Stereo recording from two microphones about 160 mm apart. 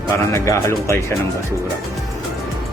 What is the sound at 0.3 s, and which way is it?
Speech, 20° left (ahead or behind).